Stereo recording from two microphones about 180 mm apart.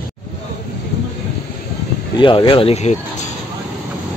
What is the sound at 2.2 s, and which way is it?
Speech, 25° left (ahead or behind).